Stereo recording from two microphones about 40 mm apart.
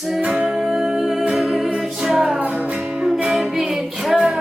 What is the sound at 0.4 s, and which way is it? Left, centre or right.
Music, centre.